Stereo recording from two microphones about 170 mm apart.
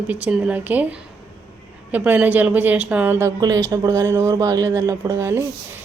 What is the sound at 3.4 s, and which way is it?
A woman's voice, 20° right (ahead or behind).